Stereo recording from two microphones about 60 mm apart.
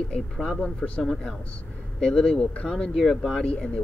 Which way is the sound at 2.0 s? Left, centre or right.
Centre.